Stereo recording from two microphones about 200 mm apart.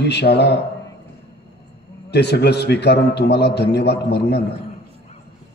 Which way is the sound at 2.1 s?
55° left (ahead or behind).